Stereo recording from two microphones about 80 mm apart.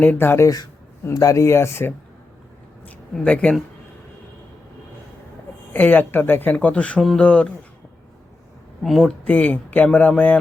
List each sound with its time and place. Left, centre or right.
0.0 s speech: left
0.4 s speech: left
1.1 s speech: left
2.8 s a sound: centre
5.7 s speech: left
8.8 s speech: centre
9.2 s speech: centre